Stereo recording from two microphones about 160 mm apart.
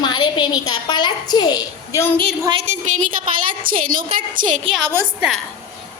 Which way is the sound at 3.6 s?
60° right (ahead or behind).